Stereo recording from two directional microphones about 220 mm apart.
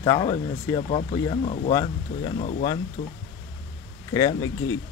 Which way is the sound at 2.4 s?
30° left (ahead or behind).